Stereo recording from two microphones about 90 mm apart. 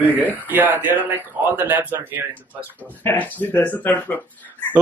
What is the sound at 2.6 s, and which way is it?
Speech, 20° left (ahead or behind).